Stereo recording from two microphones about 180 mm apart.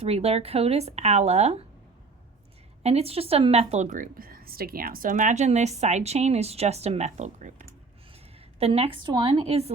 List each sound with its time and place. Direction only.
0.0 s a woman's voice: 35° right (ahead or behind)
2.8 s a woman's voice: 35° right (ahead or behind)
8.5 s a woman's voice: 35° right (ahead or behind)